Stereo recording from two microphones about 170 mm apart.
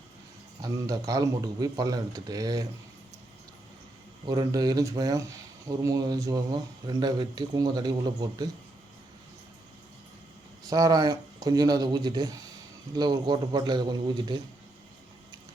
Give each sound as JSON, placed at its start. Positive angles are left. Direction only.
{"t": 0.6, "sound": "speech", "side_deg": -20}
{"t": 4.3, "sound": "speech", "side_deg": -20}
{"t": 10.7, "sound": "speech", "side_deg": -20}